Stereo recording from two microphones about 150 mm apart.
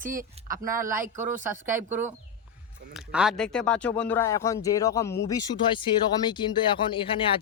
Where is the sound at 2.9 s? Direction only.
5° right (ahead or behind); by 7.4 s 35° left (ahead or behind).